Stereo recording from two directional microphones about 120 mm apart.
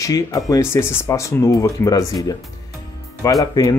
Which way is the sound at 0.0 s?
30° left (ahead or behind).